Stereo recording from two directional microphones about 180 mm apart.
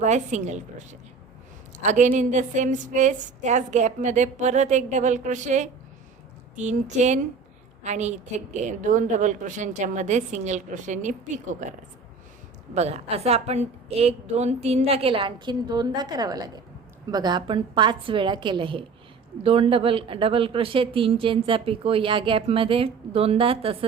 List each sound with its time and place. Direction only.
0.0 s a woman's voice: 40° right (ahead or behind)
12.7 s a woman's voice: 35° right (ahead or behind)